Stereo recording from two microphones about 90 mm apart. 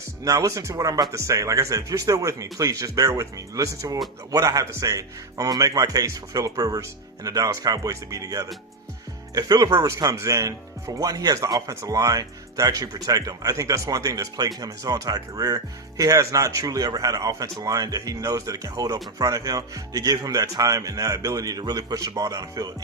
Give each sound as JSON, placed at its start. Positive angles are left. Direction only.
{"t": 0.3, "sound": "speech", "side_deg": -40}